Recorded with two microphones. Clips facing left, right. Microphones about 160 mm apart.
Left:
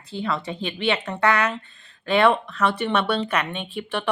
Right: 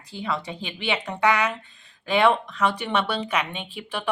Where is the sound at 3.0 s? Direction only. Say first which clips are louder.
Left 2 dB; 60° left (ahead or behind).